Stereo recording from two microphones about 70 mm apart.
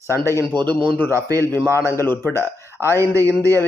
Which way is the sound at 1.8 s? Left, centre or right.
Left.